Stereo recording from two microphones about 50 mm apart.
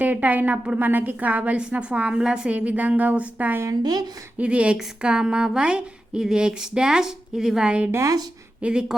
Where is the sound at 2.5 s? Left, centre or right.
Right; by 7.6 s centre.